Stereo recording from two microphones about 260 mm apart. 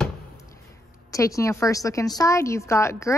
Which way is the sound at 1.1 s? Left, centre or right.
Centre.